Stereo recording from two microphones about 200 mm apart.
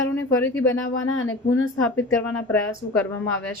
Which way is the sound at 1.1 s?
75° left (ahead or behind).